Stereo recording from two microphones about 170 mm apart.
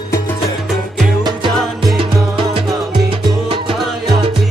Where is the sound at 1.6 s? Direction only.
Centre (ahead or behind).